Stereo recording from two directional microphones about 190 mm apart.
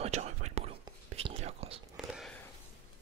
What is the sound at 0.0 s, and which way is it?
Whispering, 35° right (ahead or behind).